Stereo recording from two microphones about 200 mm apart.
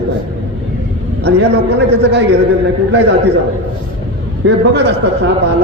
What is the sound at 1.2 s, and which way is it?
A man's voice, 60° right (ahead or behind).